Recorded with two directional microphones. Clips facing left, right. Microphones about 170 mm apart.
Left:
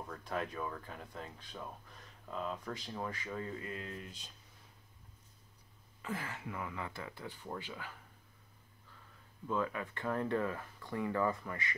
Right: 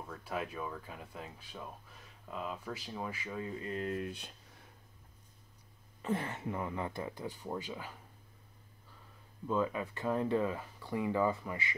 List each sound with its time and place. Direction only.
0.1 s speech: 5° right (ahead or behind)
3.7 s speech: 50° right (ahead or behind)
6.0 s speech: 25° right (ahead or behind)
9.5 s speech: 20° right (ahead or behind)